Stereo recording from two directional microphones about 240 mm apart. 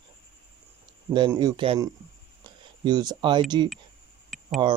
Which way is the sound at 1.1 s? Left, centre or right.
Centre.